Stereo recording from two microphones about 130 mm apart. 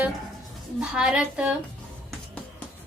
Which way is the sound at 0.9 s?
5° right (ahead or behind).